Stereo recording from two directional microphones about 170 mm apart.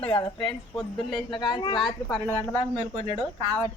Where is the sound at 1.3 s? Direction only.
25° left (ahead or behind).